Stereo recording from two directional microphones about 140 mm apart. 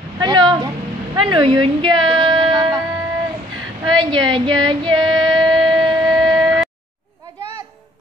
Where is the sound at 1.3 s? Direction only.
35° right (ahead or behind).